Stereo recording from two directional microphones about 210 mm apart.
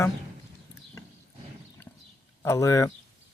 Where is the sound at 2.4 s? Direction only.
15° left (ahead or behind).